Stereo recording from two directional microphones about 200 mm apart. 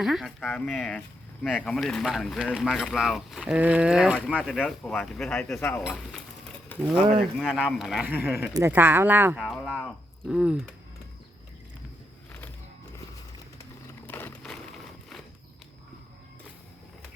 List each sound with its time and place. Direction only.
0.0 s speech: centre (ahead or behind)
5.8 s speech: centre (ahead or behind)
7.3 s speech: centre (ahead or behind)
14.1 s a sound: 10° left (ahead or behind)